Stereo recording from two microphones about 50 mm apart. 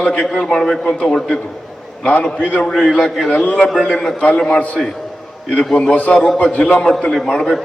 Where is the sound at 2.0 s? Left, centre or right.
Left.